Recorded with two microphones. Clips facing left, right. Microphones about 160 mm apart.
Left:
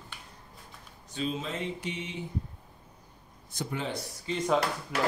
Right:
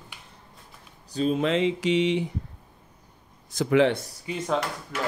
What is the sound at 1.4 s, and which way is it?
Mantra, 90° right.